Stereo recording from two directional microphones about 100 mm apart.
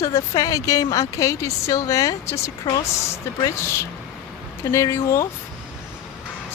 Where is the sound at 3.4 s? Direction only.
25° left (ahead or behind).